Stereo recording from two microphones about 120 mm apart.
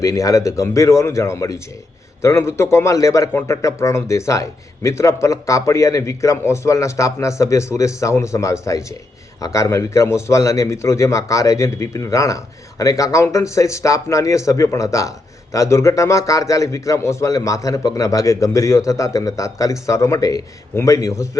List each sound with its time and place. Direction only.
0.0 s a man's voice: 25° left (ahead or behind)